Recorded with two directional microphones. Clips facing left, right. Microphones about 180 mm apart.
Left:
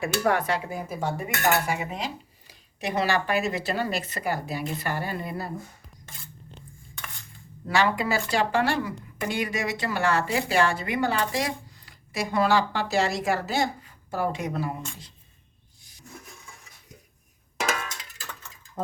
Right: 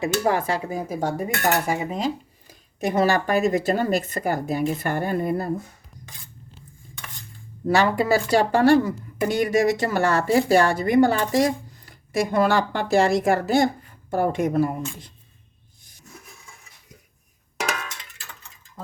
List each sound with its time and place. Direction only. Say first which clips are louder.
0.0 s speech: right 2 dB; 25° right (ahead or behind)
0.9 s speech: right 4 dB; 45° right (ahead or behind)
7.7 s speech: right 5 dB; 40° right (ahead or behind)